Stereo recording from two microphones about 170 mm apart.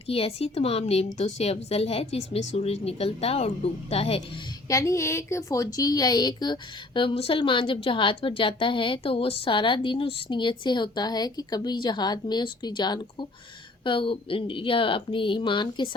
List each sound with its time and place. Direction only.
0.1 s a woman's voice: 35° left (ahead or behind)
4.7 s a woman's voice: 20° left (ahead or behind)